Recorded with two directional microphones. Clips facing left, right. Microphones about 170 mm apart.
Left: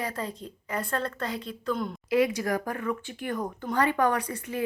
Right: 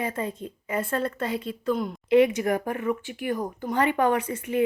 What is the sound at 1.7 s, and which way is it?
Speech, 5° right (ahead or behind).